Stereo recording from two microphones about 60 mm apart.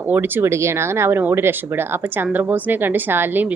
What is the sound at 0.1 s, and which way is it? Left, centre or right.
Speech, right.